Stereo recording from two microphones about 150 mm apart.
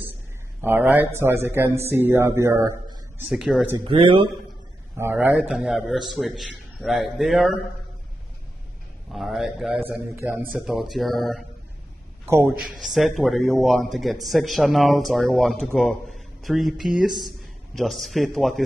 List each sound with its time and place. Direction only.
0.6 s a man's voice: 15° right (ahead or behind)
3.3 s speech: 5° right (ahead or behind)
3.8 s speech: 35° right (ahead or behind)
4.9 s a man's voice: 15° right (ahead or behind)
5.3 s speech: centre (ahead or behind)
9.1 s speech: centre (ahead or behind)
9.8 s a man's voice: 10° right (ahead or behind)
10.5 s speech: centre (ahead or behind)
12.3 s a man's voice: 15° right (ahead or behind)
12.8 s speech: centre (ahead or behind)